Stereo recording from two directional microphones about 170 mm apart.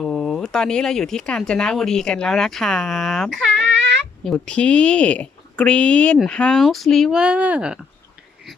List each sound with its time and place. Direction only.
0.0 s speech: centre (ahead or behind)
3.8 s a sound: 90° right
4.2 s speech: 5° left (ahead or behind)